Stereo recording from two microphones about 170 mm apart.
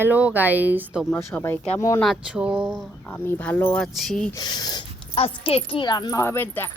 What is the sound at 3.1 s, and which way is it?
Speech, 10° left (ahead or behind).